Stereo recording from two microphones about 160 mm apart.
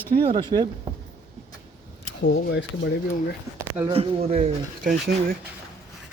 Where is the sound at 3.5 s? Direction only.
15° right (ahead or behind).